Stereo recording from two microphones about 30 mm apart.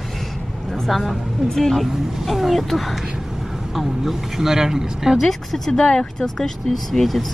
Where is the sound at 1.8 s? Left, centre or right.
Centre.